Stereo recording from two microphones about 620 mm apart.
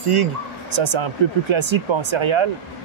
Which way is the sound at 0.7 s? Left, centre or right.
Right.